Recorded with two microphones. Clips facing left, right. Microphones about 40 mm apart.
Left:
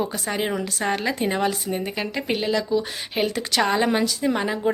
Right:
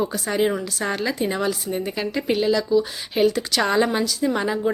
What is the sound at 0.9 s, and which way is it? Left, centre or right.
Speech, left.